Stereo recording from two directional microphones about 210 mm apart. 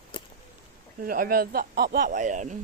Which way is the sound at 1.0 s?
40° right (ahead or behind).